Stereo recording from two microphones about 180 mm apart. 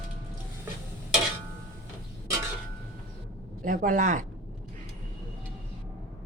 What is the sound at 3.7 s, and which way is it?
Speech, 45° right (ahead or behind).